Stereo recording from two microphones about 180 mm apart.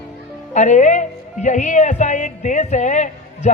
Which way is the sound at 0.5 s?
40° left (ahead or behind).